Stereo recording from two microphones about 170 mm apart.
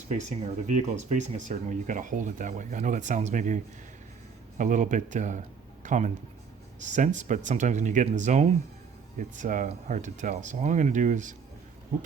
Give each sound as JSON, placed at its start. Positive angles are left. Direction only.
{"t": 0.1, "sound": "speech", "side_deg": -45}